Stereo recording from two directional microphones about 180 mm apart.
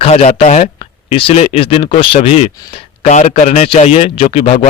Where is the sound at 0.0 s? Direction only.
35° left (ahead or behind).